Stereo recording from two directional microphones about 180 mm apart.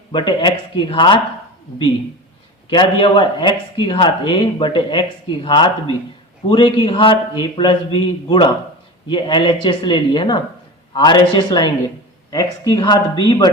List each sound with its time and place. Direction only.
0.1 s speech: 25° left (ahead or behind)
2.6 s speech: 25° left (ahead or behind)